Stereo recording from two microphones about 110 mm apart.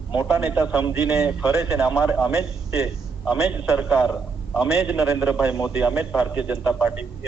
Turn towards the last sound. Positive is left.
turn(degrees=-10)  # may be behind; listen again after turning